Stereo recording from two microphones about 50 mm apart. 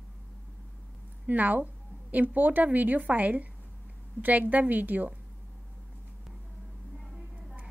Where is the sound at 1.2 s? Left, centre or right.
Right.